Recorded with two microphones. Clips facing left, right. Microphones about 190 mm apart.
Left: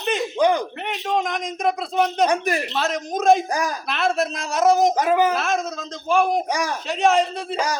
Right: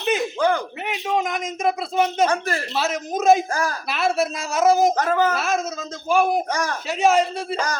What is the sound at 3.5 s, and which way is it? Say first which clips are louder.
Speech: left 1 dB; 15° left (ahead or behind).